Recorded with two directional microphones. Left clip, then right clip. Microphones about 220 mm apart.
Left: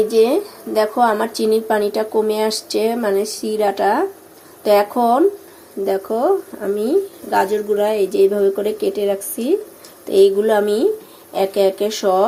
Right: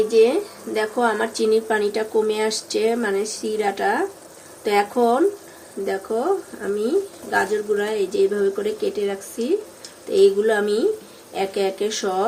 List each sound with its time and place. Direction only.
0.1 s speech: 15° left (ahead or behind)